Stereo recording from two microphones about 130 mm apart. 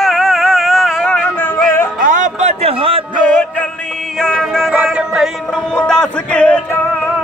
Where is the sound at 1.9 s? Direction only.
85° right; by 3.0 s 50° right (ahead or behind).